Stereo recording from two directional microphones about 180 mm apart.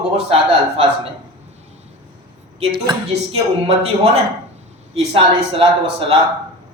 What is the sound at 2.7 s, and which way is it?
Speech, 25° right (ahead or behind).